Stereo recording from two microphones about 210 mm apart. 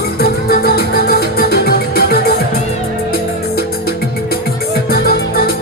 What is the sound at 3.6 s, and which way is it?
Music, 45° left (ahead or behind).